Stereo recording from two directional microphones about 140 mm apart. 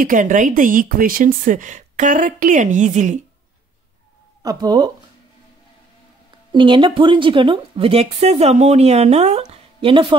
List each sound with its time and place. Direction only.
0.0 s speech: 65° right (ahead or behind)
4.4 s speech: 25° right (ahead or behind)
6.5 s a woman's voice: 35° right (ahead or behind)